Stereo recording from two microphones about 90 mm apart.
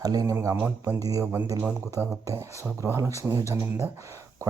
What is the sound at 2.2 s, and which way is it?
Speech, 35° right (ahead or behind).